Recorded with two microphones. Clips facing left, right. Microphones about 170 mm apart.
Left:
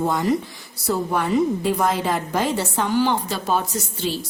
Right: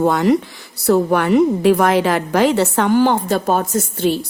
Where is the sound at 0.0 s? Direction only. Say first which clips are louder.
Right 6 dB; 70° right (ahead or behind).